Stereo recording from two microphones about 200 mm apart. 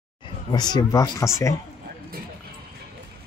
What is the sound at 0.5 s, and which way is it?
Speech, 20° left (ahead or behind).